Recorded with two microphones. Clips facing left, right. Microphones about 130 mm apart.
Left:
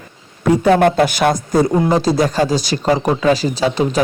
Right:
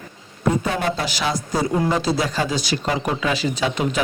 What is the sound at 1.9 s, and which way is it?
Speech, 40° left (ahead or behind).